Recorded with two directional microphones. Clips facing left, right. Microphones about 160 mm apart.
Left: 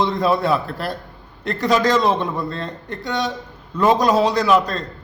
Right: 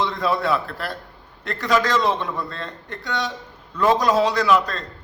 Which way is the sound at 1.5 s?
30° left (ahead or behind).